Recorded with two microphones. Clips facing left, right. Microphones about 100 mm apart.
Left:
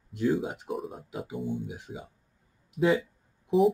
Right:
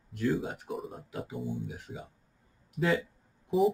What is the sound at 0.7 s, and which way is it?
Speech, centre (ahead or behind).